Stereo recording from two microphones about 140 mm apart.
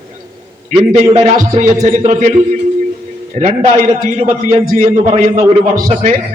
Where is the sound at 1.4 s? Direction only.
65° right (ahead or behind).